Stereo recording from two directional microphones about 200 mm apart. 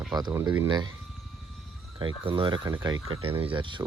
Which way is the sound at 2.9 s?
90° right.